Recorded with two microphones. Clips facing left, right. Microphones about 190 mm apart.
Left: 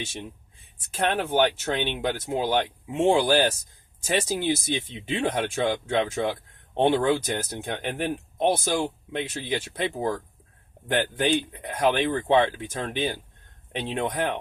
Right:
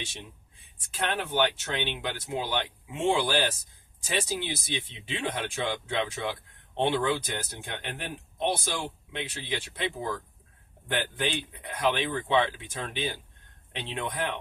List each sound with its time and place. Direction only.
0.0 s speech: 45° left (ahead or behind)